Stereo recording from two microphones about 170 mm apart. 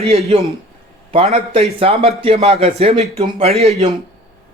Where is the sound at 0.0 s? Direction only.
35° right (ahead or behind).